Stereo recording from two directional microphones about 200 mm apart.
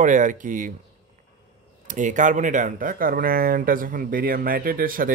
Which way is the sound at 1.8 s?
40° right (ahead or behind).